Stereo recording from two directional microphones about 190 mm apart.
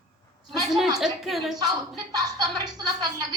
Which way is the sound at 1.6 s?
20° right (ahead or behind).